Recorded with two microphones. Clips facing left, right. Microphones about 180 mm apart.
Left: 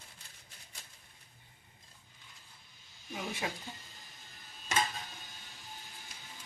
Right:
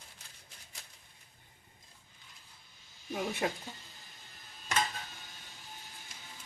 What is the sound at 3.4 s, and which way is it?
Speech, 45° right (ahead or behind).